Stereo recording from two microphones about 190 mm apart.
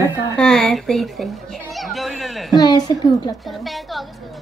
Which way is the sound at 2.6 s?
20° left (ahead or behind).